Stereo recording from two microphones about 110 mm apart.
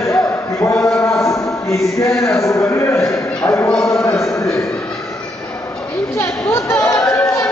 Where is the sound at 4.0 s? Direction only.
25° left (ahead or behind).